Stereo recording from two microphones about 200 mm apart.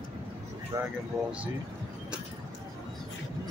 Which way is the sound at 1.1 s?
Centre (ahead or behind).